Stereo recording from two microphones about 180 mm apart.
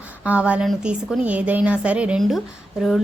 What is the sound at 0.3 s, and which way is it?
A woman's voice, 5° right (ahead or behind).